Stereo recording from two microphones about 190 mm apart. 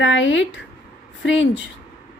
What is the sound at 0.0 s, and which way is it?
Speech, 75° left (ahead or behind).